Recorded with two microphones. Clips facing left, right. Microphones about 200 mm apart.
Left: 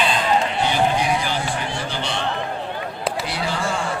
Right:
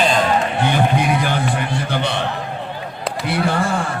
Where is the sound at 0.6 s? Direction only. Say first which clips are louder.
Right 2 dB; 55° right (ahead or behind).